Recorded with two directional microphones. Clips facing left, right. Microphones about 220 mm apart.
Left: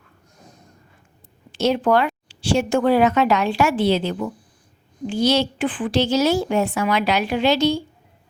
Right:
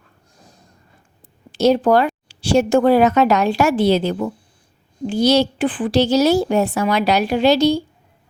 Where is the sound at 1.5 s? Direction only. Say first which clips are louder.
Right 4 dB; 35° right (ahead or behind).